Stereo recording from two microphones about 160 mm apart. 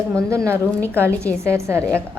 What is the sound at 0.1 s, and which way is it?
Speech, 20° right (ahead or behind).